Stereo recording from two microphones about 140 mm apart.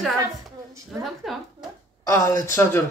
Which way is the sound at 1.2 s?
Centre (ahead or behind).